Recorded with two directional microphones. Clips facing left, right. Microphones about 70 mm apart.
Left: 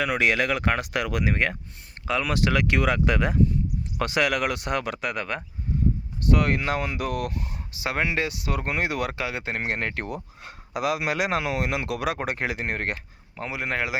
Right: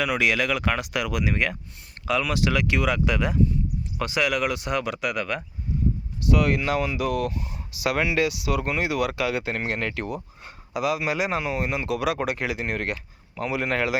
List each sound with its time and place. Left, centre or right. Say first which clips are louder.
0.0 s speech: even; left
3.9 s speech: left 1 dB; left
7.7 s speech: right 2 dB; left
9.2 s speech: right 3 dB; left
10.4 s speech: right 1 dB; left
11.9 s speech: right 2 dB; left
13.3 s speech: right 3 dB; left